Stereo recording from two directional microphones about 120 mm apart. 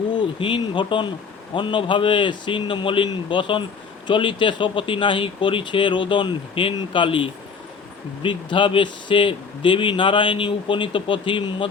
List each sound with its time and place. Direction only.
0.1 s a man's voice: 40° left (ahead or behind)